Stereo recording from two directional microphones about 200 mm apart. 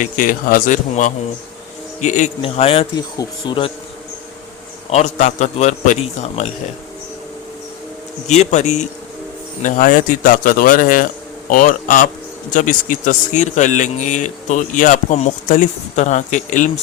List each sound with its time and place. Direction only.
0.0 s speech: 45° left (ahead or behind); by 3.7 s 25° left (ahead or behind)
4.9 s speech: 35° left (ahead or behind)
8.3 s speech: 35° left (ahead or behind)